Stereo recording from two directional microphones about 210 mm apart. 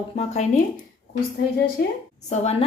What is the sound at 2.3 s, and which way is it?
Speech, 30° left (ahead or behind).